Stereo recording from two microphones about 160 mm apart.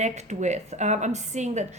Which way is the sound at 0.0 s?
45° right (ahead or behind).